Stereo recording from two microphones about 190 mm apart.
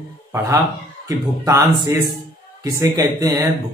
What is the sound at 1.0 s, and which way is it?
Speech, 15° right (ahead or behind).